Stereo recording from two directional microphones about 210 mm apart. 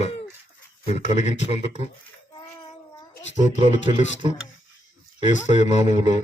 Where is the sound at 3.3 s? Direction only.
30° right (ahead or behind).